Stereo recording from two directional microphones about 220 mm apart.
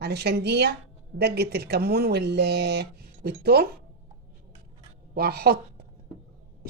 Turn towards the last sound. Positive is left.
turn(degrees=-45)  # may be behind; listen again after turning